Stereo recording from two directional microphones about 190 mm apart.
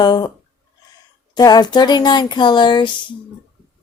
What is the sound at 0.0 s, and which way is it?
Speech, 20° left (ahead or behind).